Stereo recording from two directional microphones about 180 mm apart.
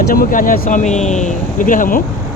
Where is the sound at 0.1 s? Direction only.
50° left (ahead or behind).